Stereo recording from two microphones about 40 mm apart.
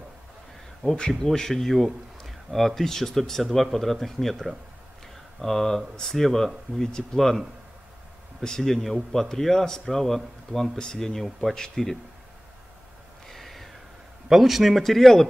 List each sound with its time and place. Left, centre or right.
0.9 s a man's voice: centre
3.4 s speech: centre
5.0 s a sound: centre
5.9 s a man's voice: centre
7.2 s a man's voice: centre
10.8 s a man's voice: centre
13.3 s gasp: centre
14.3 s a man's voice: centre